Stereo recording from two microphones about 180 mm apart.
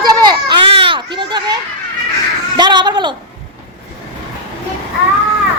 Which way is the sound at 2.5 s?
25° right (ahead or behind).